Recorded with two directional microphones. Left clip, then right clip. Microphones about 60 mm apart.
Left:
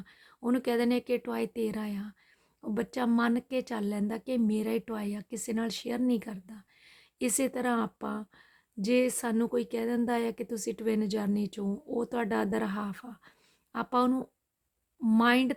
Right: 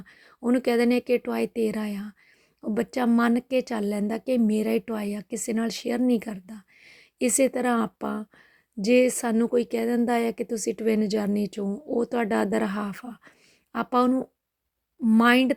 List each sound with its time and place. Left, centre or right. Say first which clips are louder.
0.0 s a sound: right 4 dB; right
0.3 s speech: right 6 dB; right
0.6 s speech: right 6 dB; right
2.6 s speech: right 6 dB; right
9.3 s a woman's voice: right 6 dB; right
9.6 s speech: right 6 dB; right
15.2 s speech: right 6 dB; right